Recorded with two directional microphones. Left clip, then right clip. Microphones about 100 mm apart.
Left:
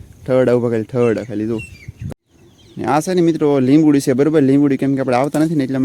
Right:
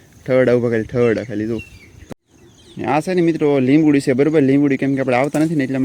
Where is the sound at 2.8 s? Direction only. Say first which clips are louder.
Left 2 dB; 40° left (ahead or behind).